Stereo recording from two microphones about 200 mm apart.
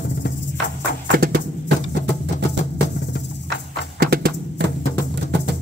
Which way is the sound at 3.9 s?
50° right (ahead or behind).